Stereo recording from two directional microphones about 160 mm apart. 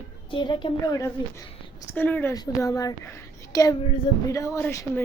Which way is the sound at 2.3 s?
25° left (ahead or behind).